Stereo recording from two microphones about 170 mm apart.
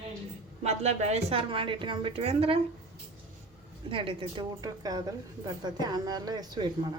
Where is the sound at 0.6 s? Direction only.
40° right (ahead or behind).